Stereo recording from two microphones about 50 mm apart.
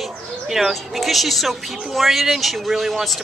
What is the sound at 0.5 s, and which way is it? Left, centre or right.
Speech, centre.